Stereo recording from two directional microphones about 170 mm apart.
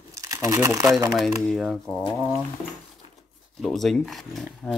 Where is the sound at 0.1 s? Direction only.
20° right (ahead or behind).